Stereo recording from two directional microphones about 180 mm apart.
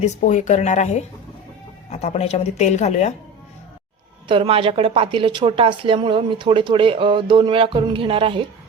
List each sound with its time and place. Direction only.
0.0 s speech: 45° left (ahead or behind)
4.3 s a woman's voice: 30° right (ahead or behind)